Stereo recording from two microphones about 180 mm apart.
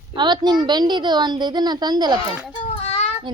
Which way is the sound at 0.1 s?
25° right (ahead or behind).